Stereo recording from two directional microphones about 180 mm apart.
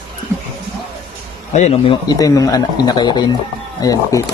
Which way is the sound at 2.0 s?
20° left (ahead or behind).